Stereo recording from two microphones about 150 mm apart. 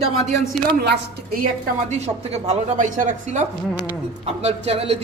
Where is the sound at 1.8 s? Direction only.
45° right (ahead or behind).